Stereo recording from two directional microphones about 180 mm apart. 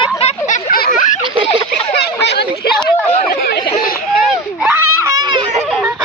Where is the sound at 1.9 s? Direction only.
70° left (ahead or behind).